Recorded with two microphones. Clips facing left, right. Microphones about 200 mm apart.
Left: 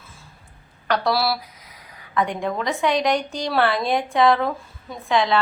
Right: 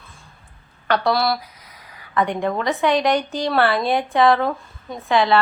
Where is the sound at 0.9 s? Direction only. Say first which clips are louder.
Right 2 dB; centre (ahead or behind).